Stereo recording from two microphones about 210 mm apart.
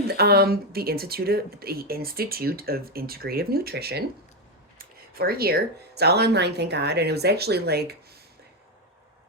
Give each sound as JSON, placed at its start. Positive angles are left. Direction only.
{"t": 0.1, "sound": "speech", "side_deg": -50}